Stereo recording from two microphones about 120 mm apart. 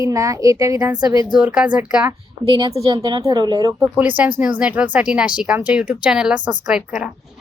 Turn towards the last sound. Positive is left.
turn(degrees=-5)  # may be behind; listen again after turning